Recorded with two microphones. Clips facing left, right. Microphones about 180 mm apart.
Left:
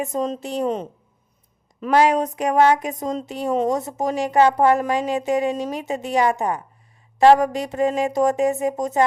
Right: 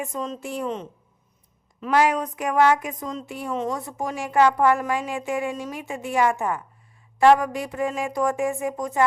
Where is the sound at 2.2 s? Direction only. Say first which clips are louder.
Left 5 dB; 40° left (ahead or behind).